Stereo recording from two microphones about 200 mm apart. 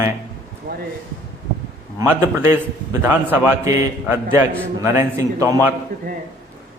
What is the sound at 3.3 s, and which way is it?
A man's voice, 15° right (ahead or behind).